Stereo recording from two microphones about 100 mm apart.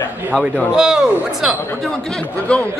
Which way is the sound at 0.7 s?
5° right (ahead or behind).